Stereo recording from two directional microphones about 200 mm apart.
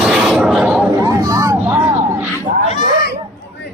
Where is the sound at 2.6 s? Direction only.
35° left (ahead or behind).